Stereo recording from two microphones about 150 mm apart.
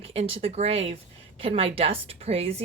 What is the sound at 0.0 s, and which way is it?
Speech, 40° right (ahead or behind).